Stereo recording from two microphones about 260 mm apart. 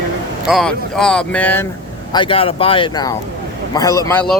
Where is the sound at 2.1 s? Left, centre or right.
Centre.